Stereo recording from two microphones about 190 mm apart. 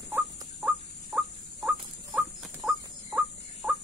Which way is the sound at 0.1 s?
10° right (ahead or behind).